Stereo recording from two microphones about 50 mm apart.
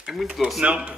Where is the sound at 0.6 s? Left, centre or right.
Centre.